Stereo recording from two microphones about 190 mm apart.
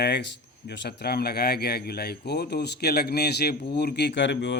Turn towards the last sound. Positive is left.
turn(degrees=70)  # may be behind; listen again after turning